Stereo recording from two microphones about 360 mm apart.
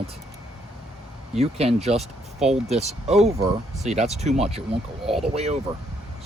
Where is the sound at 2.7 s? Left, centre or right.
Centre.